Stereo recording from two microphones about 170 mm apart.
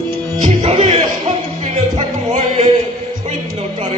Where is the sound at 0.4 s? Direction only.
40° right (ahead or behind).